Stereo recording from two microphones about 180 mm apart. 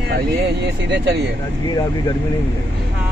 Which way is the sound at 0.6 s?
70° right (ahead or behind).